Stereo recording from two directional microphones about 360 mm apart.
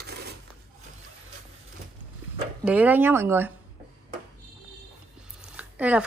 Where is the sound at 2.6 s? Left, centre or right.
Centre.